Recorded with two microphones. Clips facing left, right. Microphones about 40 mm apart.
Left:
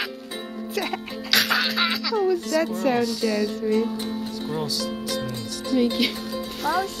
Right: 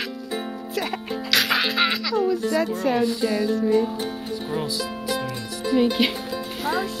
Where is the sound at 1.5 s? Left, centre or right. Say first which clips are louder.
Right 1 dB; right.